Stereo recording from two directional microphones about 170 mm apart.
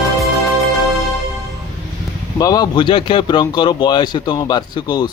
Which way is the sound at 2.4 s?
20° left (ahead or behind).